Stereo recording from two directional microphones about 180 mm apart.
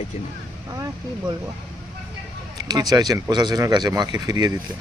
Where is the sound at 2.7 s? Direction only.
20° right (ahead or behind).